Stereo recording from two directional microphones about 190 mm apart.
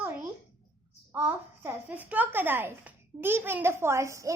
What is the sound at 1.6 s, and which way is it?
A woman's voice, 10° right (ahead or behind).